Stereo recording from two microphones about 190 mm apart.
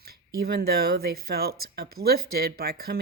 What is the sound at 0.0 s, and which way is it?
Speech, 55° right (ahead or behind).